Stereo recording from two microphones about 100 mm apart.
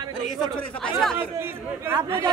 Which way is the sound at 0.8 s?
5° left (ahead or behind).